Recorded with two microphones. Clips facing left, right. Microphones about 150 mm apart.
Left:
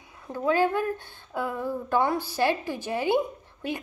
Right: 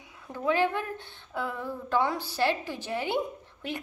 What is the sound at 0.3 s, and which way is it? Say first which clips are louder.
Speech: left 4 dB; 25° left (ahead or behind).